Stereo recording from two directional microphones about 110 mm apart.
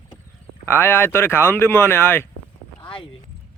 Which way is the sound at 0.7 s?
20° left (ahead or behind).